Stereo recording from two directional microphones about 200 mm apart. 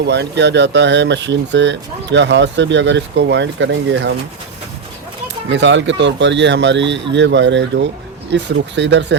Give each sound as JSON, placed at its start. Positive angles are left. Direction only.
{"t": 0.0, "sound": "speech", "side_deg": -60}
{"t": 5.5, "sound": "speech", "side_deg": -65}